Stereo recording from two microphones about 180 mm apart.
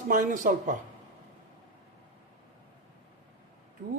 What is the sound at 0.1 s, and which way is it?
Speech, 45° right (ahead or behind).